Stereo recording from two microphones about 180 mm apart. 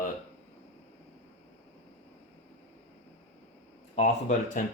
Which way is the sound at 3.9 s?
40° left (ahead or behind).